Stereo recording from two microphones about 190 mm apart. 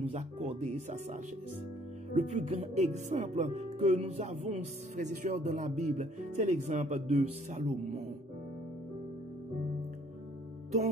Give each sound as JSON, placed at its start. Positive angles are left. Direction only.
{"t": 0.0, "sound": "speech", "side_deg": -40}
{"t": 2.1, "sound": "speech", "side_deg": -35}